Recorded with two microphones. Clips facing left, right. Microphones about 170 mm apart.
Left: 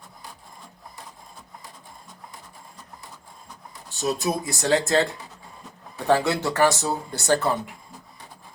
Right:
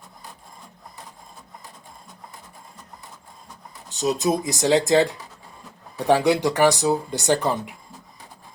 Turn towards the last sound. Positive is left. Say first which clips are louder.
# right 1 dB
turn(degrees=-15)  # may be behind; listen again after turning